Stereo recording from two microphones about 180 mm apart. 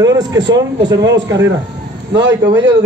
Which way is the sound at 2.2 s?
75° right (ahead or behind).